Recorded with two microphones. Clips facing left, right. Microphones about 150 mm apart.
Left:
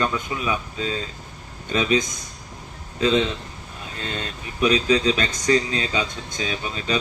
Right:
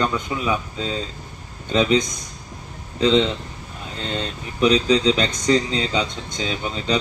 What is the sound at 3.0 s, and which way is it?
A man's voice, 20° right (ahead or behind).